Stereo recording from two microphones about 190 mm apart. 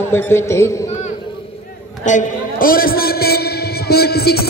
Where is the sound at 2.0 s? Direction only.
45° left (ahead or behind).